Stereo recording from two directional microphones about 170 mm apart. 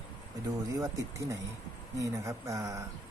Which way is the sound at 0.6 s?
20° right (ahead or behind).